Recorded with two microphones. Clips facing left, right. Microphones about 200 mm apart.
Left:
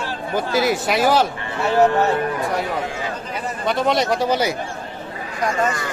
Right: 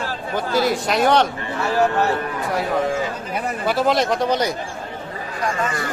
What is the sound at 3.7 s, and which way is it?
Speech, 5° right (ahead or behind).